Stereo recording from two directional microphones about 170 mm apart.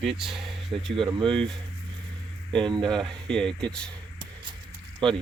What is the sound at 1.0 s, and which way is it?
Speech, 25° right (ahead or behind).